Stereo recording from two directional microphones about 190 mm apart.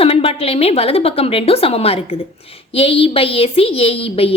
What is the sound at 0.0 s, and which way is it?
A woman's voice, 30° left (ahead or behind).